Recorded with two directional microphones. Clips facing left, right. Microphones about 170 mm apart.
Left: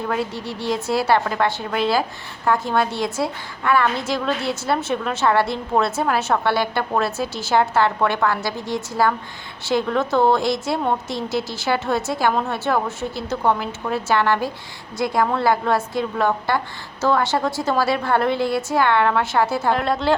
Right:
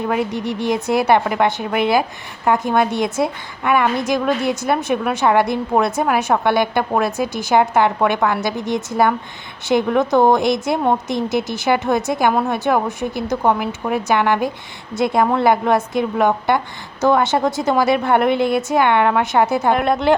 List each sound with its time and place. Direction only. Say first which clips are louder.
0.0 s a woman's voice: right 4 dB; 20° right (ahead or behind)